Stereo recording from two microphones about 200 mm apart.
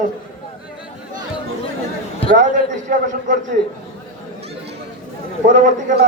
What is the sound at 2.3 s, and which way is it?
A man's voice, 40° right (ahead or behind).